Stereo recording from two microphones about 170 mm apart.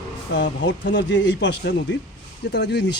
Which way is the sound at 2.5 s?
80° left.